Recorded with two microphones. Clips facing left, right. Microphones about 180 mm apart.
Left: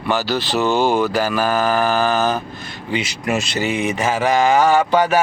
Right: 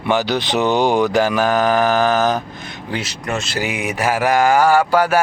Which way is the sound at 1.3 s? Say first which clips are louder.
Right 2 dB; 5° left (ahead or behind).